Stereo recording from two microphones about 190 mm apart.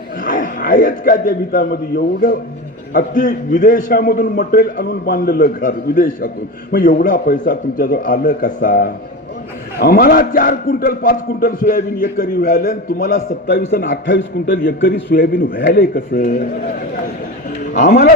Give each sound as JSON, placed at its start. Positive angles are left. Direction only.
{"t": 0.3, "sound": "a man's voice", "side_deg": 45}
{"t": 13.7, "sound": "a man's voice", "side_deg": 60}
{"t": 17.6, "sound": "speech", "side_deg": 40}